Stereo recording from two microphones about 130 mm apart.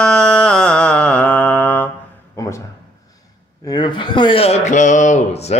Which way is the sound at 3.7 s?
35° left (ahead or behind).